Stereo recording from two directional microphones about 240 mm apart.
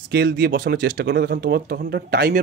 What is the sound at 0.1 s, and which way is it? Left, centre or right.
Speech, right.